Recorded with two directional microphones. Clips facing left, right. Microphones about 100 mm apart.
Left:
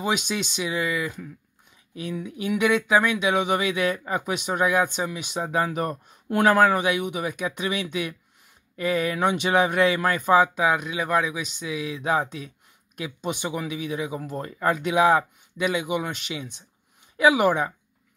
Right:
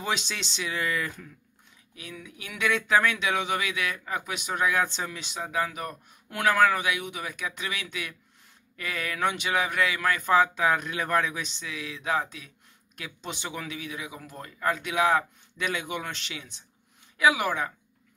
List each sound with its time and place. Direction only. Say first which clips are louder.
0.0 s speech: left 5 dB; 15° left (ahead or behind)
2.0 s speech: left 12 dB; 25° left (ahead or behind)
2.5 s speech: left 4 dB; 15° left (ahead or behind)